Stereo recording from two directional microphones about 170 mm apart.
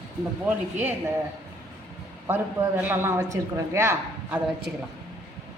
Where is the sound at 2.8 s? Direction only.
15° right (ahead or behind).